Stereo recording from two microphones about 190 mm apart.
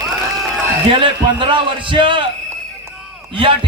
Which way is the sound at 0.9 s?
25° right (ahead or behind).